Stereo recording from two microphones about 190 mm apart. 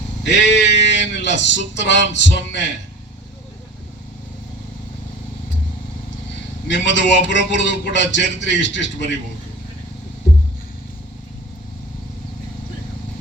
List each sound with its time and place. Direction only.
0.3 s speech: 70° left (ahead or behind)
6.7 s speech: 70° left (ahead or behind)